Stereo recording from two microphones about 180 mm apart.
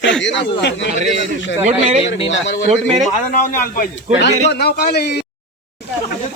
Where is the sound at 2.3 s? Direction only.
90° left.